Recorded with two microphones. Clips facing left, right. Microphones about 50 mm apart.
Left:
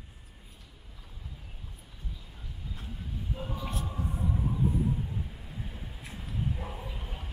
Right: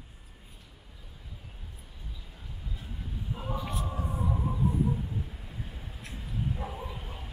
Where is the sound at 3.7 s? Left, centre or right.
Right.